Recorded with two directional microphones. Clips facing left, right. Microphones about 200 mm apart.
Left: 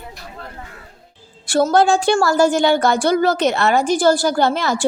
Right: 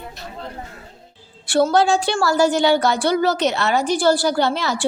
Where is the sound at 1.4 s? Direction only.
45° left (ahead or behind).